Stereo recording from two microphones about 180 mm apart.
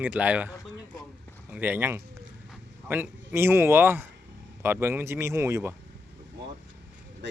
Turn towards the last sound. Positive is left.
turn(degrees=-15)  # may be behind; listen again after turning